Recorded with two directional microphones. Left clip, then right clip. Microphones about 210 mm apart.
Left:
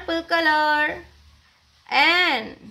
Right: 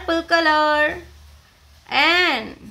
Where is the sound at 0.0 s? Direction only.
10° right (ahead or behind).